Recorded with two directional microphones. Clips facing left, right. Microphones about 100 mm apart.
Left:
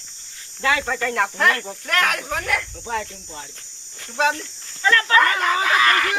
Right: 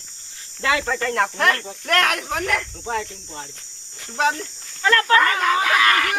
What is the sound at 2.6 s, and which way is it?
Speech, 30° right (ahead or behind).